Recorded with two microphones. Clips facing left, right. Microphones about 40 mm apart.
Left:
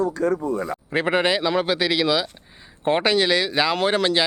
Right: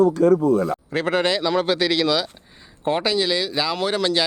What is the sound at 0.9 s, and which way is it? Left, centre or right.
Speech, left.